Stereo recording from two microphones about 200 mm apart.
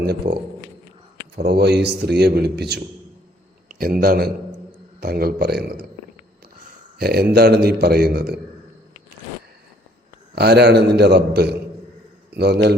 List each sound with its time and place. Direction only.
0.0 s a man's voice: 55° right (ahead or behind)
1.4 s a man's voice: 55° right (ahead or behind)
3.7 s a sound: 45° right (ahead or behind)
4.0 s a man's voice: 50° right (ahead or behind)
7.0 s a man's voice: 50° right (ahead or behind)
10.3 s a man's voice: 55° right (ahead or behind)